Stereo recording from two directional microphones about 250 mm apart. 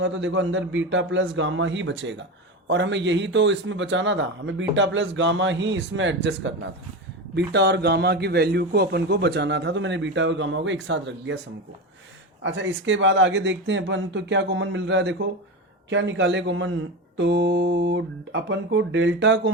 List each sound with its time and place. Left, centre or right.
0.0 s a man's voice: right
12.4 s a man's voice: right